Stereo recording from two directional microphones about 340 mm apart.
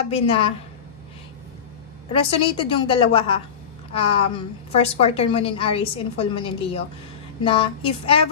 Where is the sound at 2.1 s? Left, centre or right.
Centre.